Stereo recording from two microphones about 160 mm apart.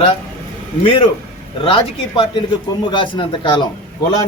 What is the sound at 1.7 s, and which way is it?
A man's voice, 30° left (ahead or behind).